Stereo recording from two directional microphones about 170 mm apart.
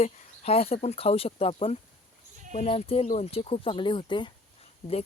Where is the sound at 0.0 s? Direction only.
40° left (ahead or behind).